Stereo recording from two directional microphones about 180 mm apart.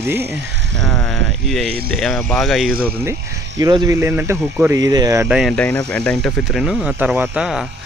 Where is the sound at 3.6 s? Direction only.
20° right (ahead or behind).